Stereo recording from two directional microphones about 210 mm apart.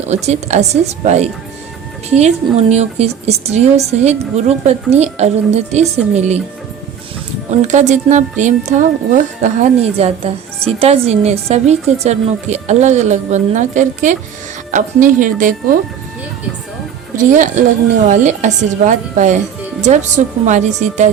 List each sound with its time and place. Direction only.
0.1 s speech: 30° right (ahead or behind)
7.5 s speech: 35° right (ahead or behind)
17.3 s speech: 35° right (ahead or behind)